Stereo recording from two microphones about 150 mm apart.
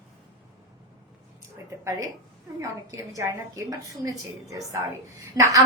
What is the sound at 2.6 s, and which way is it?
A woman's voice, 20° right (ahead or behind).